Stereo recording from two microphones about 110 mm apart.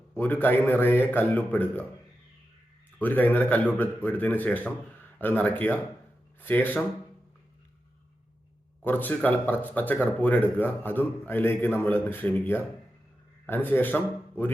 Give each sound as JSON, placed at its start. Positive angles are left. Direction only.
{"t": 0.1, "sound": "speech", "side_deg": 15}
{"t": 3.0, "sound": "speech", "side_deg": 15}
{"t": 8.8, "sound": "speech", "side_deg": 15}